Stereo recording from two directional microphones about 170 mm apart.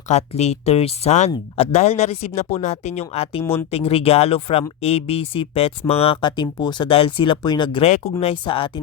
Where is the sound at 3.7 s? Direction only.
35° left (ahead or behind).